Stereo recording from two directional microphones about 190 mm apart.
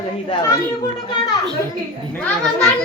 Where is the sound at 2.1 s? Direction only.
10° left (ahead or behind).